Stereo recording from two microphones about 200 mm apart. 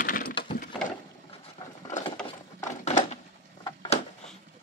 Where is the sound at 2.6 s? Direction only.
35° left (ahead or behind).